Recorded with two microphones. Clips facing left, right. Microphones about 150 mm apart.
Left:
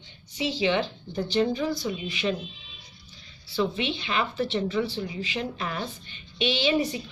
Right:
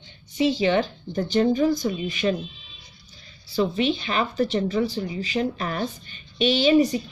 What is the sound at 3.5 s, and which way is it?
A woman's voice, 40° right (ahead or behind).